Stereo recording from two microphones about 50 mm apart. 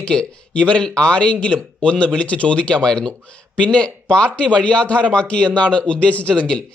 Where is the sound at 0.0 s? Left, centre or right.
Left.